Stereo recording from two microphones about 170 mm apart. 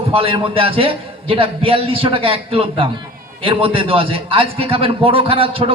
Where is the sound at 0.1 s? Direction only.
35° right (ahead or behind).